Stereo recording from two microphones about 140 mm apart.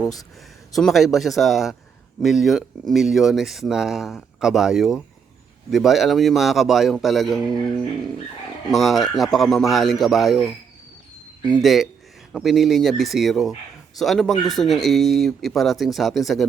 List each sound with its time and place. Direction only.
0.0 s speech: 25° left (ahead or behind)
0.7 s speech: centre (ahead or behind)
11.6 s speech: centre (ahead or behind)